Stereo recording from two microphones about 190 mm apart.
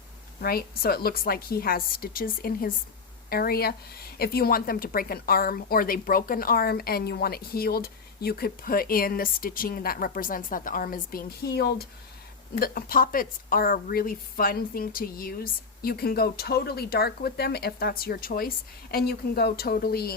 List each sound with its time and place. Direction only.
0.4 s speech: 50° left (ahead or behind)